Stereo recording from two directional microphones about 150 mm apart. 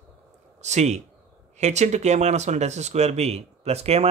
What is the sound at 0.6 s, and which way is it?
Speech, 50° right (ahead or behind).